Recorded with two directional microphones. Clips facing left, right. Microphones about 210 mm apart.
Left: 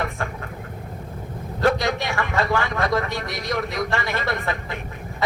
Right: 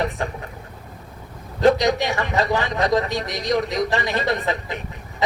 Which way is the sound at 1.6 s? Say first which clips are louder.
Right 4 dB; 20° right (ahead or behind).